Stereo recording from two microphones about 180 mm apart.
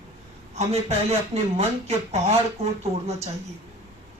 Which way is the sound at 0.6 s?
35° right (ahead or behind).